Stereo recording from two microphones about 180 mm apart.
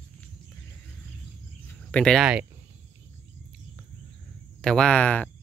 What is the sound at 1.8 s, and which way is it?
Speech, 5° left (ahead or behind).